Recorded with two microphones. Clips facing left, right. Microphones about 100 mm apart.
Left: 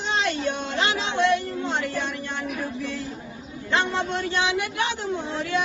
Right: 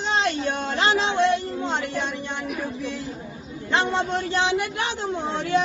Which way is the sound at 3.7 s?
30° right (ahead or behind).